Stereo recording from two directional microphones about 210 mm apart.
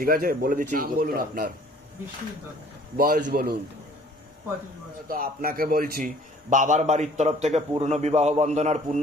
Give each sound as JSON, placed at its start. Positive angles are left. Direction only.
{"t": 0.0, "sound": "a man's voice", "side_deg": -45}
{"t": 3.0, "sound": "a man's voice", "side_deg": -45}
{"t": 5.0, "sound": "a man's voice", "side_deg": -40}